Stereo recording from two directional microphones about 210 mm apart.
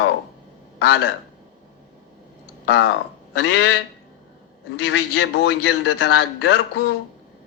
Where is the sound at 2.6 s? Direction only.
60° left (ahead or behind).